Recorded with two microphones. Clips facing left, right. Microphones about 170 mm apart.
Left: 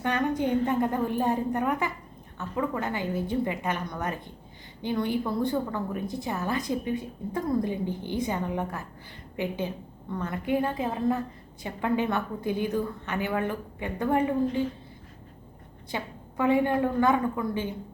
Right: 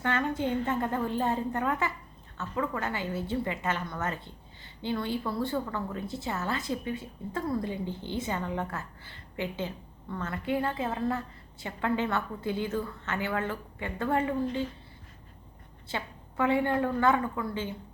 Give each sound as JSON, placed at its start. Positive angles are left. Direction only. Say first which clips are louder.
{"t": 0.0, "sound": "a woman's voice", "louder": "left 3 dB", "side_deg": 15}
{"t": 15.9, "sound": "a woman's voice", "louder": "left 2 dB", "side_deg": 15}